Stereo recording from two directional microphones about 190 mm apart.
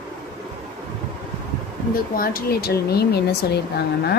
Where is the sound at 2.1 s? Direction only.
50° left (ahead or behind).